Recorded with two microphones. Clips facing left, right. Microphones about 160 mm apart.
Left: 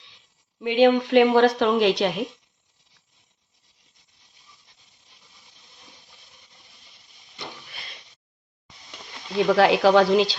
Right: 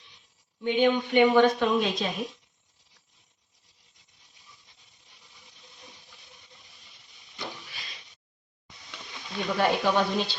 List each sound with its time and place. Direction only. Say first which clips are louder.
0.6 s a woman's voice: left 6 dB; 90° left
9.5 s speech: left 8 dB; 90° left